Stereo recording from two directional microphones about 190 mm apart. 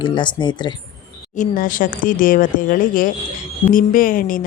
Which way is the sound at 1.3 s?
45° left (ahead or behind).